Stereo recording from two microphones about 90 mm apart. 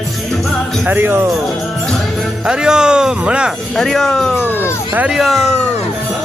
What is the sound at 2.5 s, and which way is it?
Speech, 10° right (ahead or behind).